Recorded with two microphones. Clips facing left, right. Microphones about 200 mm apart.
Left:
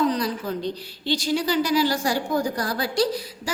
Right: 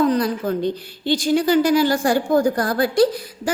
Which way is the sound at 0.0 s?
55° right (ahead or behind).